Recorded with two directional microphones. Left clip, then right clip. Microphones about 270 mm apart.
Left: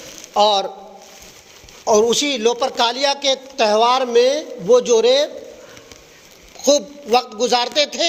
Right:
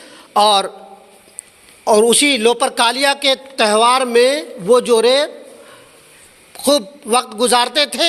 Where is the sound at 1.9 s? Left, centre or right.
Right.